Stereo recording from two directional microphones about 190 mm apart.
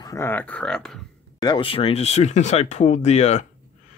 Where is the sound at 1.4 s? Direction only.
25° left (ahead or behind).